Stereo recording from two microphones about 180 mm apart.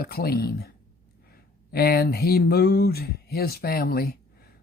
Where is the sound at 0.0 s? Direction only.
55° left (ahead or behind).